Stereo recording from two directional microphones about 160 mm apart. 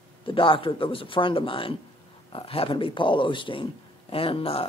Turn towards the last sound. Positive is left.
turn(degrees=35)  # may be behind; listen again after turning